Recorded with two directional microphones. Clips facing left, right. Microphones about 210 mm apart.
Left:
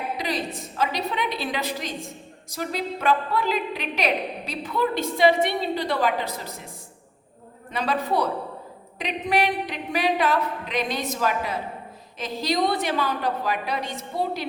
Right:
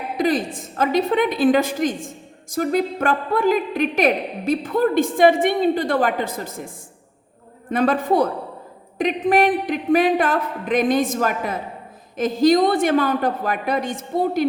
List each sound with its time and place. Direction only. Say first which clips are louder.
0.2 s a woman's voice: right 8 dB; 50° right (ahead or behind)
7.7 s a woman's voice: right 7 dB; 50° right (ahead or behind)